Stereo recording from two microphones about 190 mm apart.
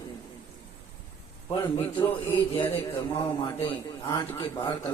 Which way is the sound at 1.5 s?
25° left (ahead or behind).